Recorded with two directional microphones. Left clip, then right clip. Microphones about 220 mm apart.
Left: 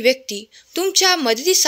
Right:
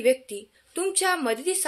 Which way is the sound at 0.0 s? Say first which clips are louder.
Left 5 dB; 40° left (ahead or behind).